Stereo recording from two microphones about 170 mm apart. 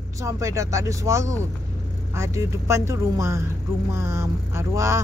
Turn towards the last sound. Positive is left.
turn(degrees=-15)  # may be behind; listen again after turning